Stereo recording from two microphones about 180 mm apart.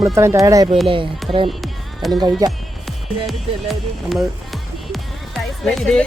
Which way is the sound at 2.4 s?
20° right (ahead or behind).